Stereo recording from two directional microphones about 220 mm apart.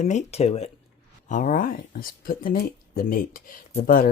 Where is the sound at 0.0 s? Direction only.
30° left (ahead or behind).